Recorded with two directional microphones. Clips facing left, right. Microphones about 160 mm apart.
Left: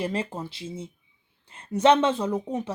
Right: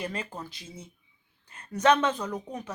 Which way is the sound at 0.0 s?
30° left (ahead or behind).